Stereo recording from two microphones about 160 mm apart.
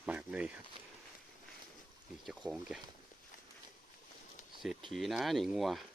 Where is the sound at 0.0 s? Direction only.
5° right (ahead or behind).